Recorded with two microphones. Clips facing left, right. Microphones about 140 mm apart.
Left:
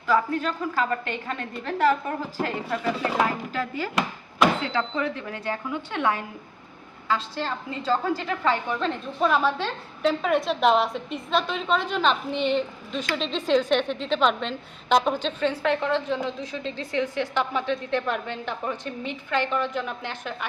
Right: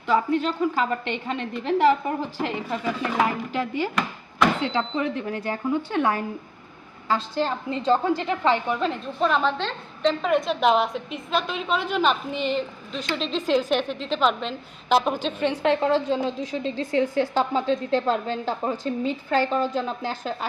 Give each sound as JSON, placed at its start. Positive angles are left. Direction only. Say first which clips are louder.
{"t": 0.1, "sound": "a woman's voice", "louder": "right 2 dB", "side_deg": -20}
{"t": 4.6, "sound": "a woman's voice", "louder": "right 2 dB", "side_deg": -25}
{"t": 8.7, "sound": "speech", "louder": "right 2 dB", "side_deg": -5}
{"t": 9.2, "sound": "a woman's voice", "louder": "even", "side_deg": 10}
{"t": 15.4, "sound": "a woman's voice", "louder": "right 3 dB", "side_deg": -25}